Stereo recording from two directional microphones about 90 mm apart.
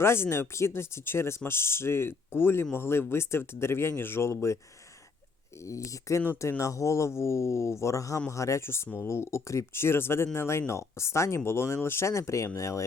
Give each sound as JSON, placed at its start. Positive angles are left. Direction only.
{"t": 0.0, "sound": "speech", "side_deg": 25}